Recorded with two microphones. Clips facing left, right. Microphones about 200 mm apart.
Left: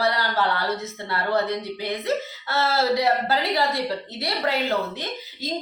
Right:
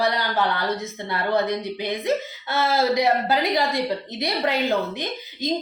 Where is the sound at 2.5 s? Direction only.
15° right (ahead or behind).